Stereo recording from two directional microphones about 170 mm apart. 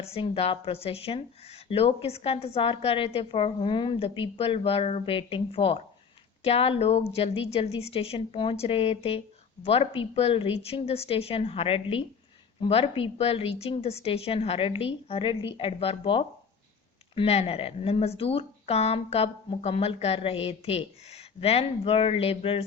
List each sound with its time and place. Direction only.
0.0 s a woman's voice: 35° left (ahead or behind)